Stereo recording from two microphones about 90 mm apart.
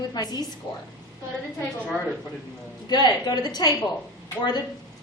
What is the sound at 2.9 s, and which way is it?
A woman's voice, 50° left (ahead or behind).